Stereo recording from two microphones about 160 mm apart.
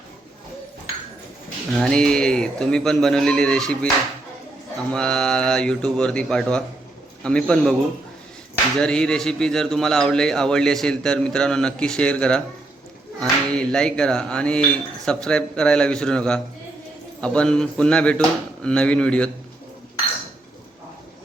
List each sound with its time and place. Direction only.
1.8 s a man's voice: 5° left (ahead or behind)
4.9 s a man's voice: 5° left (ahead or behind)
8.8 s a man's voice: 5° left (ahead or behind)